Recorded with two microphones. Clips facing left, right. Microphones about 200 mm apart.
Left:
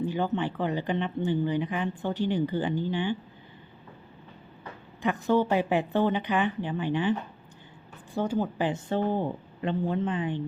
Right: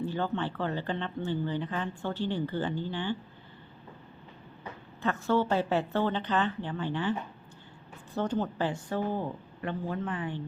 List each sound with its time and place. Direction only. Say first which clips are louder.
0.0 s speech: left 3 dB; 15° left (ahead or behind)
5.0 s a woman's voice: left 3 dB; 15° left (ahead or behind)